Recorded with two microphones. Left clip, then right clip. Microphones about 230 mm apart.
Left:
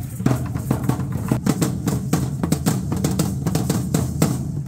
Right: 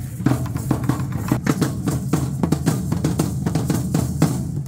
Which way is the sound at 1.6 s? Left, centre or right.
Left.